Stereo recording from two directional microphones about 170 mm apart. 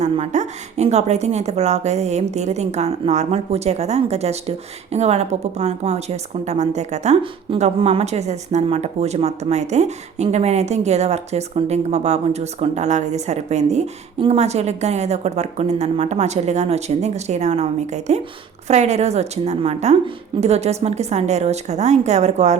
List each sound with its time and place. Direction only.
0.0 s a woman's voice: 40° right (ahead or behind)